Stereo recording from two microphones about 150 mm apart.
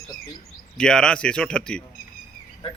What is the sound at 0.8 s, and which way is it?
A man's voice, 5° left (ahead or behind).